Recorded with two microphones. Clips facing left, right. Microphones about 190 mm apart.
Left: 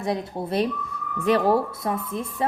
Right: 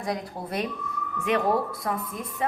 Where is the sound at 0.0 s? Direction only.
25° left (ahead or behind).